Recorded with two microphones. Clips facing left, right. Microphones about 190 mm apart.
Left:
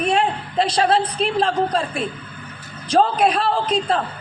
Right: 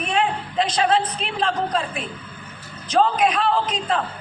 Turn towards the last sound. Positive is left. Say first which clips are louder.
# left 3 dB
turn(degrees=35)  # may be behind; listen again after turning